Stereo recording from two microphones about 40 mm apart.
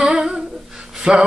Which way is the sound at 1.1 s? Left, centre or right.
Right.